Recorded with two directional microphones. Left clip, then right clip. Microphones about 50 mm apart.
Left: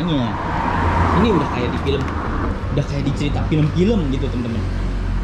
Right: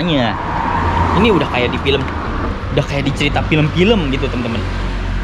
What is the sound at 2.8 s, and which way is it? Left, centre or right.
Speech, left.